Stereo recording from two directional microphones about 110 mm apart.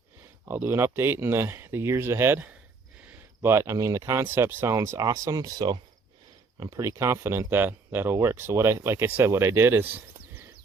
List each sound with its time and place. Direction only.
0.4 s speech: 20° right (ahead or behind); by 5.8 s 40° right (ahead or behind)
6.6 s speech: 30° right (ahead or behind)